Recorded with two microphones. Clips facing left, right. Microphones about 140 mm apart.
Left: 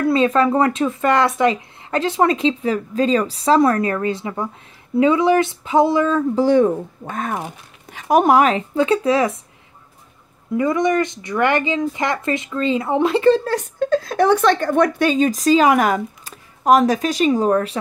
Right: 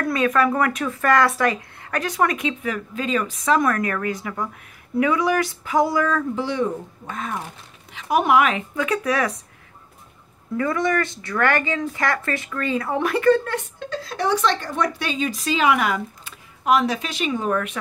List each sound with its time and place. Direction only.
0.0 s speech: 25° left (ahead or behind)
6.3 s speech: 45° left (ahead or behind); by 9.4 s 25° left (ahead or behind)
10.6 s speech: 20° left (ahead or behind); by 17.7 s 35° left (ahead or behind)